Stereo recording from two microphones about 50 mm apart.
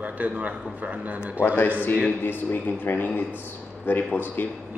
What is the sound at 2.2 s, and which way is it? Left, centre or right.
Speech, left.